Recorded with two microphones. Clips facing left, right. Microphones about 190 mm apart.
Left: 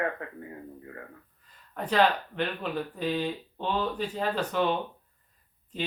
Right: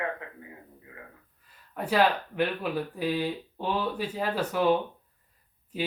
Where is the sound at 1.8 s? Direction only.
10° right (ahead or behind).